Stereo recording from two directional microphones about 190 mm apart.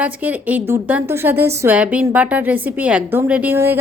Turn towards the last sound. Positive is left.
turn(degrees=-10)  # may be behind; listen again after turning